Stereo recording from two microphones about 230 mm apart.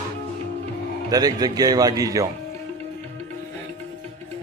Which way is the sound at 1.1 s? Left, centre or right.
Centre.